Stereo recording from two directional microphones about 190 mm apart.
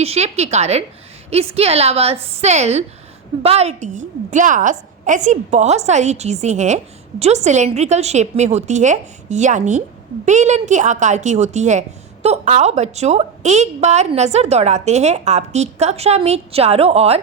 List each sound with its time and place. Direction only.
0.0 s a woman's voice: 35° right (ahead or behind)